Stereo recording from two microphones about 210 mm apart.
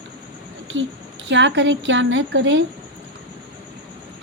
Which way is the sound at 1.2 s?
60° right (ahead or behind).